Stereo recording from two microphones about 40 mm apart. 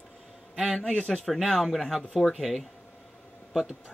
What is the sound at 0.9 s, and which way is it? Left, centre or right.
Speech, centre.